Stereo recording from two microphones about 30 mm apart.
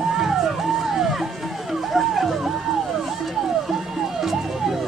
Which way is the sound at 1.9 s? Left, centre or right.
Centre.